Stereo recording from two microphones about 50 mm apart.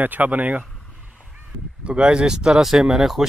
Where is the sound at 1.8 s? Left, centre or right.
Right; by 3.2 s centre.